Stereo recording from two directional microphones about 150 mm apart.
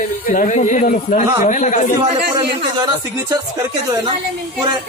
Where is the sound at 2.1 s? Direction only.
40° right (ahead or behind).